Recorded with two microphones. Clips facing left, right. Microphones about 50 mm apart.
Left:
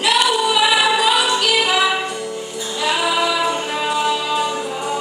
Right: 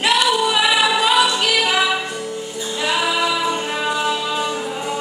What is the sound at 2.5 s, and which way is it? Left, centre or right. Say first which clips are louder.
Music: left 1 dB; centre.